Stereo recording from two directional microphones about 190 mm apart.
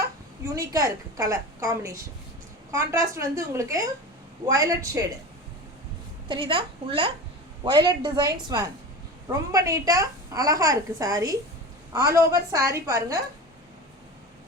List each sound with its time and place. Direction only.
0.4 s a woman's voice: 15° right (ahead or behind)
6.2 s a woman's voice: 25° right (ahead or behind)